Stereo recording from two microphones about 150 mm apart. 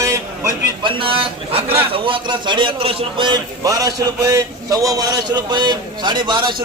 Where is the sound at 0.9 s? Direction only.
35° right (ahead or behind).